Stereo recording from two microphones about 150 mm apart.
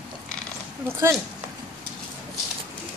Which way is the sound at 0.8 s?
15° right (ahead or behind).